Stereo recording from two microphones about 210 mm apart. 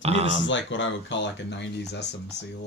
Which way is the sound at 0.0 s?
30° right (ahead or behind).